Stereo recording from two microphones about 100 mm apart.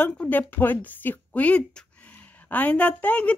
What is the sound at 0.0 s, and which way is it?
Speech, 15° left (ahead or behind).